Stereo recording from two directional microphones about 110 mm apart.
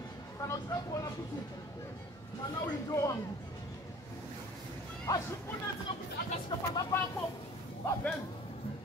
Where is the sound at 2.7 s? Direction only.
30° left (ahead or behind).